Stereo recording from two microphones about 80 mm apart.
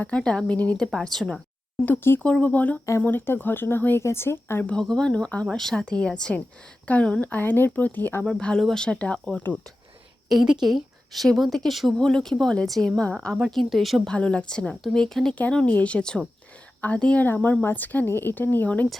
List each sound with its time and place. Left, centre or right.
0.0 s speech: centre
0.9 s a woman's voice: centre
1.8 s speech: left
4.6 s speech: centre
10.3 s a woman's voice: centre
14.1 s speech: centre